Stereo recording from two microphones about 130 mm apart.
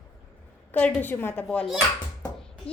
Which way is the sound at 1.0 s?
15° left (ahead or behind).